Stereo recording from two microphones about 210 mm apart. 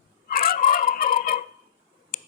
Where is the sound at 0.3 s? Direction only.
45° left (ahead or behind).